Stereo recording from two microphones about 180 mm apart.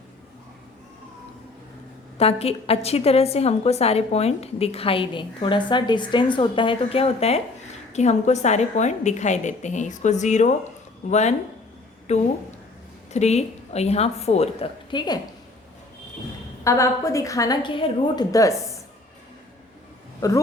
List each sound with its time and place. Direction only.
2.1 s a woman's voice: 35° left (ahead or behind)
16.6 s a woman's voice: 15° left (ahead or behind)